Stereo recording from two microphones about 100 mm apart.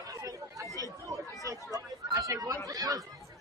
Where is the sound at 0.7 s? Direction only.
35° right (ahead or behind).